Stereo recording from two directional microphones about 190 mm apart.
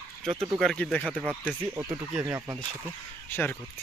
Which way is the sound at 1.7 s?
20° right (ahead or behind).